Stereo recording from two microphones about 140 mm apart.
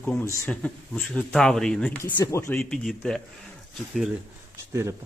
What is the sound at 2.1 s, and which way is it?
Speech, 25° left (ahead or behind).